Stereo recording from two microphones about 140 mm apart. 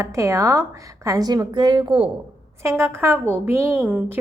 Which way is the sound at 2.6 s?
20° right (ahead or behind).